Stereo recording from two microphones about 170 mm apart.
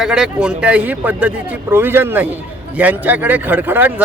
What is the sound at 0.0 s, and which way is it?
Speech, 5° right (ahead or behind).